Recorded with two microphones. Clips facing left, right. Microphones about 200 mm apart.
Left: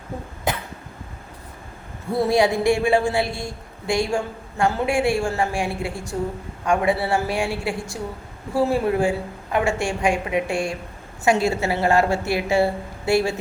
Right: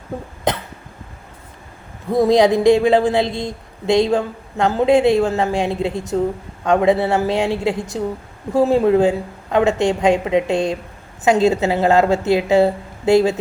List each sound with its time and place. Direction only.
2.1 s speech: 20° right (ahead or behind)